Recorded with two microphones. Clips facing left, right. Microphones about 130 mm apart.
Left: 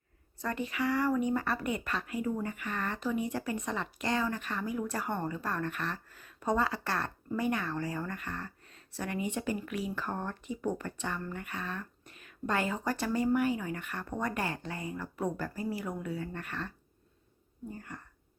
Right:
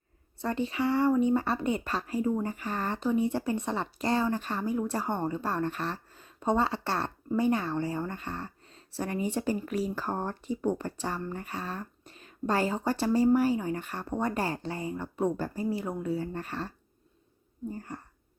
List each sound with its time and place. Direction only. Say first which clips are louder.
0.3 s speech: right 4 dB; 30° right (ahead or behind)